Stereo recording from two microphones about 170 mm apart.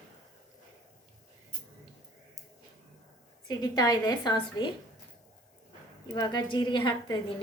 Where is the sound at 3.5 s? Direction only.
20° left (ahead or behind).